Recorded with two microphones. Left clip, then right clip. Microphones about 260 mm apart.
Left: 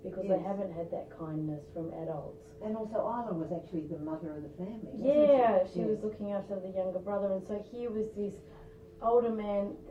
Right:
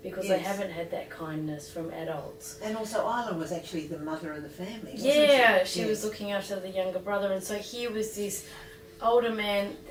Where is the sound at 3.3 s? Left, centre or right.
Centre.